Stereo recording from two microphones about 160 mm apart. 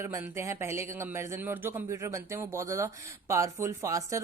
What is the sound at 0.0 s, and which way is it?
A woman's voice, 15° right (ahead or behind).